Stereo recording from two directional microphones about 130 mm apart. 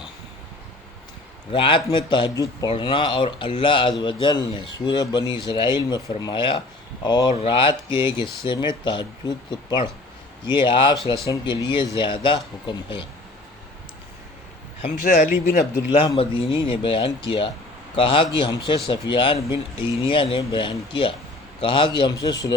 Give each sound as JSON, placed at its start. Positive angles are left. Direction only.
{"t": 1.5, "sound": "speech", "side_deg": 40}
{"t": 2.3, "sound": "speech", "side_deg": 25}
{"t": 2.6, "sound": "speech", "side_deg": 40}
{"t": 15.0, "sound": "speech", "side_deg": 75}
{"t": 16.1, "sound": "speech", "side_deg": 45}